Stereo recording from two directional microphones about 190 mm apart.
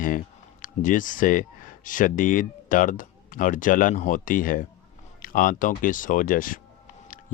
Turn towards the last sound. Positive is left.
turn(degrees=45)  # may be behind; listen again after turning